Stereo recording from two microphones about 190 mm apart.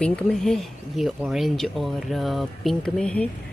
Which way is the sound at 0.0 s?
5° left (ahead or behind).